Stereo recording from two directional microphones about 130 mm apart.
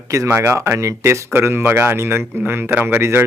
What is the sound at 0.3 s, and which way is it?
Speech, 20° right (ahead or behind).